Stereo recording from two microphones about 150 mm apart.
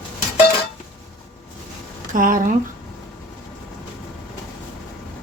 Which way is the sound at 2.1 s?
65° right (ahead or behind).